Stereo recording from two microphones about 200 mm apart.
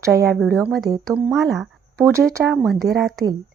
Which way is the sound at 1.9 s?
15° right (ahead or behind).